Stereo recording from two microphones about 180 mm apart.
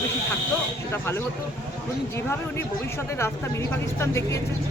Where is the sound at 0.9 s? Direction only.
15° left (ahead or behind).